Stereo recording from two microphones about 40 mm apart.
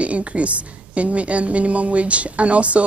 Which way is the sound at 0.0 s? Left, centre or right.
Right.